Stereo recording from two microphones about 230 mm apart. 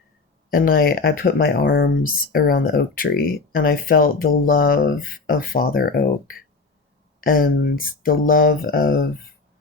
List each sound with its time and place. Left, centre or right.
0.5 s speech: left